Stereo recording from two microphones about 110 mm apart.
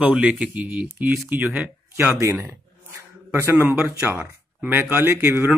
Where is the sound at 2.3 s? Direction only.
15° right (ahead or behind).